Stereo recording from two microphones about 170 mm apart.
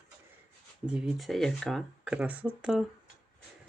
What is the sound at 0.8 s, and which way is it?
Speech, 5° right (ahead or behind).